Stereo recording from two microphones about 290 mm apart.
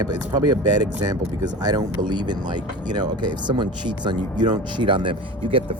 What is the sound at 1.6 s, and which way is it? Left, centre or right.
Speech, centre.